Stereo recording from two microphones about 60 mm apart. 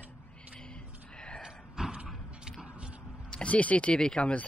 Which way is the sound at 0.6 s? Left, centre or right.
Centre.